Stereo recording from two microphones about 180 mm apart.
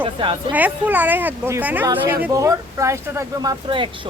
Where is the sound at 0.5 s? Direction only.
10° right (ahead or behind).